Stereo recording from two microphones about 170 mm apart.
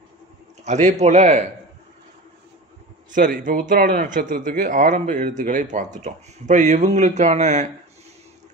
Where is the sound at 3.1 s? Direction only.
50° right (ahead or behind).